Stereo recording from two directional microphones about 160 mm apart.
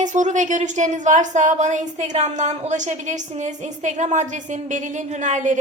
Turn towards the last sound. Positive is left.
turn(degrees=-50)  # may be behind; listen again after turning